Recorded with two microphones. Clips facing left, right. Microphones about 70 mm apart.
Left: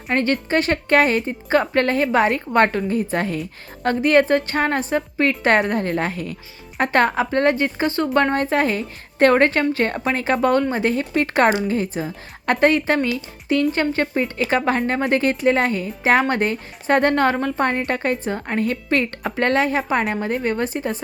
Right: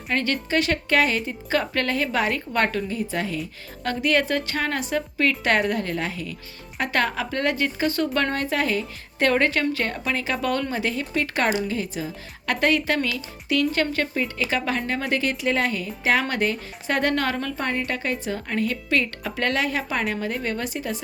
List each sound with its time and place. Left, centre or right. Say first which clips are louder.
0.1 s a woman's voice: left 4 dB; left